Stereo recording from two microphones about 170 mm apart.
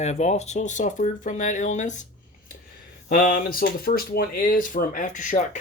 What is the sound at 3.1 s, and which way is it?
Speech, 55° left (ahead or behind).